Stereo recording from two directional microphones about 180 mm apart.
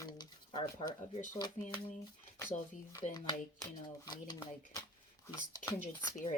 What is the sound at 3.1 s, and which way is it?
Speech, 20° left (ahead or behind).